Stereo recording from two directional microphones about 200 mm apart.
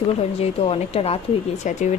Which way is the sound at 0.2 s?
30° left (ahead or behind).